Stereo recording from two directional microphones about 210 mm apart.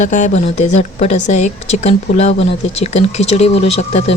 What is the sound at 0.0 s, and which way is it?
Speech, 35° left (ahead or behind).